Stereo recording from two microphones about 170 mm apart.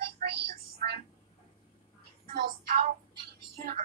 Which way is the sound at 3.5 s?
60° right (ahead or behind).